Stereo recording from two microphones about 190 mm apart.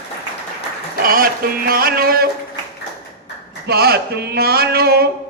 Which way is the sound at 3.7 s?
55° right (ahead or behind).